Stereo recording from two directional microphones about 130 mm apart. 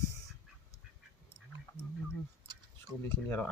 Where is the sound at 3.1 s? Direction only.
15° left (ahead or behind).